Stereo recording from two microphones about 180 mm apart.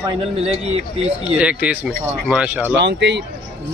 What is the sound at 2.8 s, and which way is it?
Speech, 75° right (ahead or behind).